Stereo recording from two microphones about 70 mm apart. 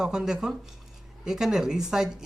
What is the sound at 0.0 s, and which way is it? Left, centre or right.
A man's voice, centre.